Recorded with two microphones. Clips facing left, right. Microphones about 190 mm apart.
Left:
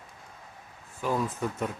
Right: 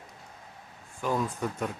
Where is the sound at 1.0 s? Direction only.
5° left (ahead or behind).